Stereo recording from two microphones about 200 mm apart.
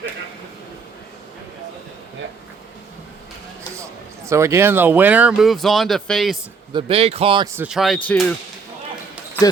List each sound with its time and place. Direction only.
4.3 s speech: 15° right (ahead or behind)
6.7 s speech: 30° right (ahead or behind)
7.5 s speech: 5° right (ahead or behind)